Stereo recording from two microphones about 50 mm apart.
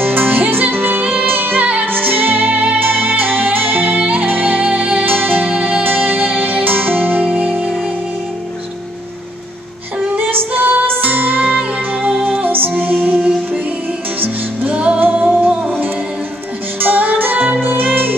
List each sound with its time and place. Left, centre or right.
0.0 s music: right
10.1 s music: right
14.2 s music: right
16.8 s music: right